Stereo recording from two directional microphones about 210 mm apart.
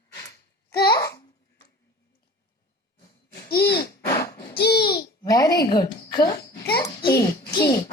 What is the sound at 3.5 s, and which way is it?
Speech, 50° left (ahead or behind).